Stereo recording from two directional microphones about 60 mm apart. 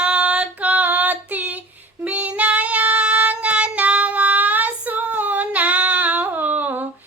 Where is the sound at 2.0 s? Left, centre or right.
Right.